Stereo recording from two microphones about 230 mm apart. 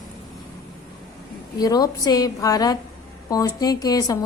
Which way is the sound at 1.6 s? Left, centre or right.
Centre.